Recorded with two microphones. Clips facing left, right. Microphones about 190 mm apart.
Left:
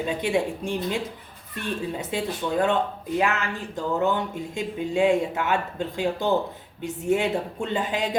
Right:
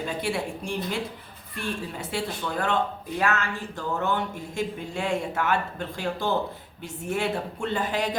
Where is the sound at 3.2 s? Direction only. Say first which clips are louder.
Even; 15° left (ahead or behind).